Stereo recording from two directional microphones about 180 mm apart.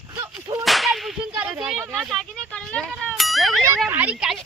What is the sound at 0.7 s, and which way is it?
Whip, centre (ahead or behind).